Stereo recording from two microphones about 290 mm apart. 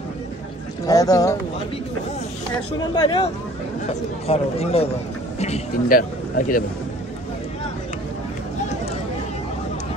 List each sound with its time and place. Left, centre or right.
0.8 s speech: centre
2.8 s speech: centre
4.3 s a man's voice: left